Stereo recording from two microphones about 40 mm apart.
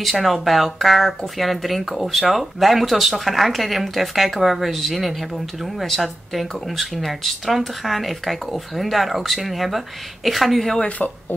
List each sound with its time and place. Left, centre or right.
0.0 s speech: centre